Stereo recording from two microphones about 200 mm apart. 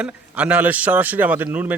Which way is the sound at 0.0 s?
5° right (ahead or behind).